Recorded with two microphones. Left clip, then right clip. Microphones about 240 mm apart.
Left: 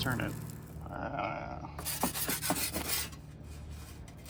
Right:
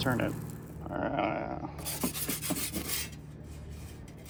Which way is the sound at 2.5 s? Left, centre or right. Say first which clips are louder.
Left 1 dB; centre.